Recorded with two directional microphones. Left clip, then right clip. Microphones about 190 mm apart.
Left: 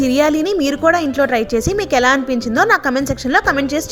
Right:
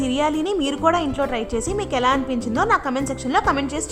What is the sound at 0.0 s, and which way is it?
A woman's voice, 15° left (ahead or behind).